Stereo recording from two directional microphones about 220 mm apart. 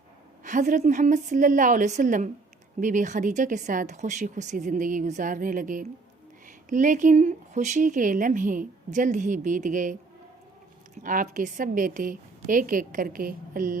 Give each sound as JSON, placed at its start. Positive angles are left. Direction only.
{"t": 0.4, "sound": "speech", "side_deg": -35}
{"t": 11.0, "sound": "speech", "side_deg": -35}